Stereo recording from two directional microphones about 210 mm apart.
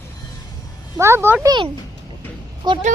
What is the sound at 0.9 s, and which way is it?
Speech, 10° right (ahead or behind).